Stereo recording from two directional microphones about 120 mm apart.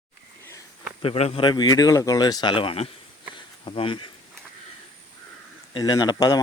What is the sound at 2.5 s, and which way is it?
Speech, 55° left (ahead or behind).